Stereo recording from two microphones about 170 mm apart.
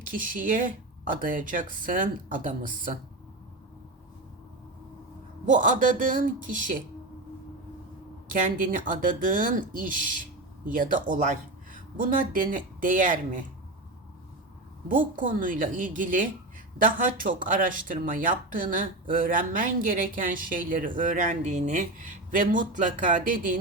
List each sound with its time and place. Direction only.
0.1 s speech: 55° right (ahead or behind)
5.5 s speech: 50° right (ahead or behind)
8.3 s speech: 50° right (ahead or behind)
14.8 s speech: 50° right (ahead or behind)